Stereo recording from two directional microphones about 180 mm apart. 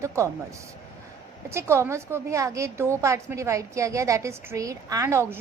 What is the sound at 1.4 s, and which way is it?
A woman's voice, 15° right (ahead or behind).